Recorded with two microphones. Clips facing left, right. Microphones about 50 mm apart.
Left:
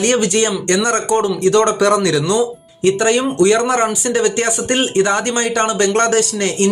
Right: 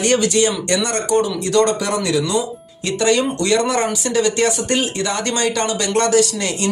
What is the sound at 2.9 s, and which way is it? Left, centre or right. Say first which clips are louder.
Speech: left 3 dB; left.